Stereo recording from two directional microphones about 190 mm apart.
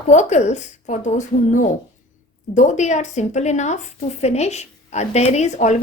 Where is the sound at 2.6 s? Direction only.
40° left (ahead or behind).